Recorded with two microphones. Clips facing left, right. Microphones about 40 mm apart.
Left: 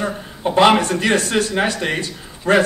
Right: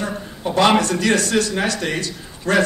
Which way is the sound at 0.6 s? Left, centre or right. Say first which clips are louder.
Left 2 dB; left.